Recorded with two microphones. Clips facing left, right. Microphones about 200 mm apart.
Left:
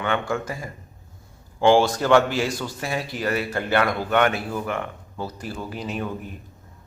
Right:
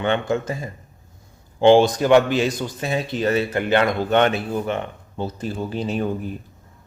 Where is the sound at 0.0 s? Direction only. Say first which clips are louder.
Right 4 dB; 25° right (ahead or behind).